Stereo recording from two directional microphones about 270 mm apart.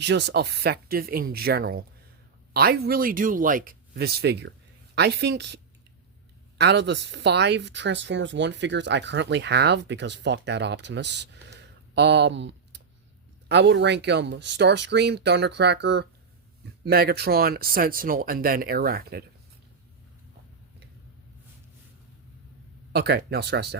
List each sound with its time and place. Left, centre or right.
0.0 s speech: right
6.6 s speech: right
22.9 s speech: right